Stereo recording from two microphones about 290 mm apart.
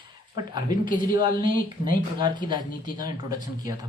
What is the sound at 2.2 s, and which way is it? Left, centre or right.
Speech, centre.